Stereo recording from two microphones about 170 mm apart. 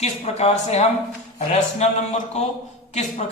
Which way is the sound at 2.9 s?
45° left (ahead or behind).